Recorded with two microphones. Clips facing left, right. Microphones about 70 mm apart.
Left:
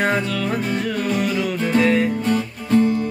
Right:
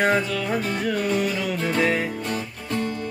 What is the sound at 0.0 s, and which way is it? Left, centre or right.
Music, centre.